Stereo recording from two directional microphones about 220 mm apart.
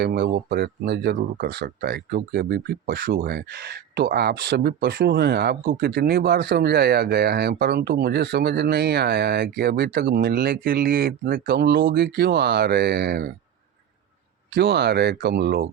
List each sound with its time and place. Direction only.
0.0 s speech: 45° right (ahead or behind)
14.5 s speech: 50° right (ahead or behind)